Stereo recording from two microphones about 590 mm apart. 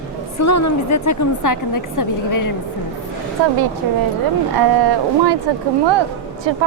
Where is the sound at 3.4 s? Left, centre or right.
Right.